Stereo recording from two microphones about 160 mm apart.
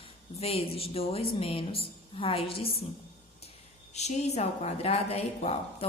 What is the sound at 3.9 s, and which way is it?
A woman's voice, 45° left (ahead or behind).